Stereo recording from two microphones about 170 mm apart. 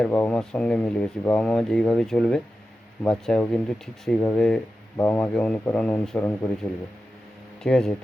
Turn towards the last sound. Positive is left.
turn(degrees=5)  # may be behind; listen again after turning